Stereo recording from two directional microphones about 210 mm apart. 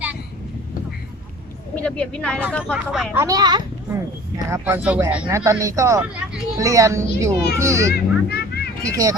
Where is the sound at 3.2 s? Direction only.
15° right (ahead or behind).